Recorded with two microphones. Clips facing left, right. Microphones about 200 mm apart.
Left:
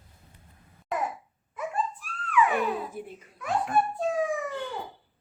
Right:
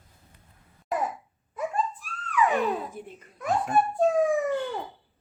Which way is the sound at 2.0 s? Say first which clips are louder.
Left 2 dB; 40° right (ahead or behind).